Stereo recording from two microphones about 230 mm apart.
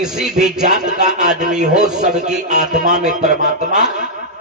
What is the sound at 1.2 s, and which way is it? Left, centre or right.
A man's voice, right.